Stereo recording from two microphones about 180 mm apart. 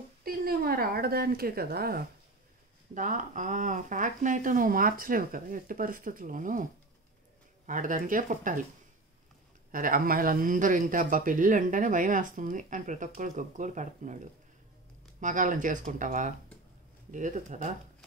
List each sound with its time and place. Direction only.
0.2 s speech: 55° right (ahead or behind)
2.9 s speech: 45° right (ahead or behind)
9.7 s speech: 50° right (ahead or behind)